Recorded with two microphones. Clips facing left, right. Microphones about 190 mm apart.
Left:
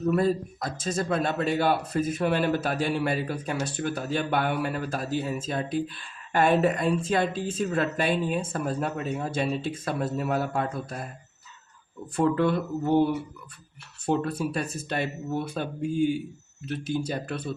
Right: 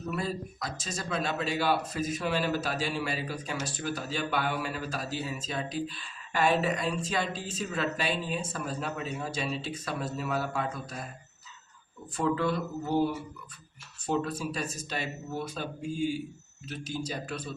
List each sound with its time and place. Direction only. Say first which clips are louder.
0.1 s speech: left 9 dB; 50° left (ahead or behind)
12.1 s speech: left 5 dB; 55° left (ahead or behind)
14.3 s speech: left 5 dB; 60° left (ahead or behind)